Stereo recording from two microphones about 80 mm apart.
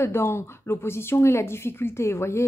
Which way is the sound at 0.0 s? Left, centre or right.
Left.